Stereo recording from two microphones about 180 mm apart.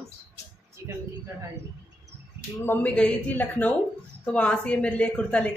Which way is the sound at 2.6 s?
10° left (ahead or behind).